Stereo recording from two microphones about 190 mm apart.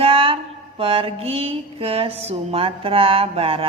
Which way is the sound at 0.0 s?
30° right (ahead or behind).